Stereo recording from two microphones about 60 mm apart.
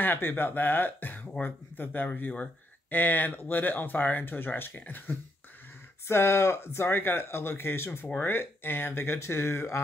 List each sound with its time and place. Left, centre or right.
0.0 s speech: left
6.0 s speech: left